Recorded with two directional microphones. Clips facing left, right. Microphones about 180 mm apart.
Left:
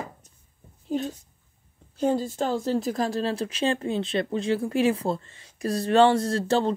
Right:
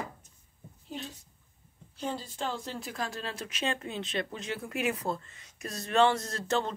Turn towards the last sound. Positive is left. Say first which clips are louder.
# left 8 dB
turn(degrees=30)  # may be behind; listen again after turning